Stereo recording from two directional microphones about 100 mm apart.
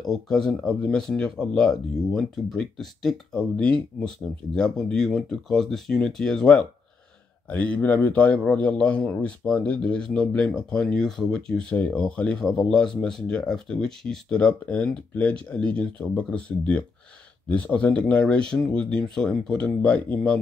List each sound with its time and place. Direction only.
0.0 s a man's voice: 5° left (ahead or behind)